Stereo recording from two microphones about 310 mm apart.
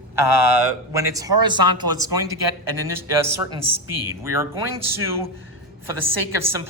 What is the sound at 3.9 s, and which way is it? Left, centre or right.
Speech, right.